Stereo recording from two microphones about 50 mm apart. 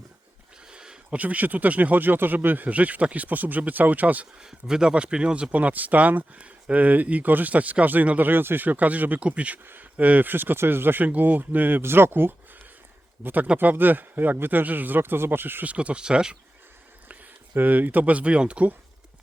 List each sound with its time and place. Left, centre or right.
0.7 s a sound: centre
1.1 s speech: right
4.4 s speech: centre; by 8.3 s right
8.3 s speech: right
9.6 s speech: right
11.8 s speech: right
13.2 s speech: right
15.6 s speech: right
17.1 s speech: right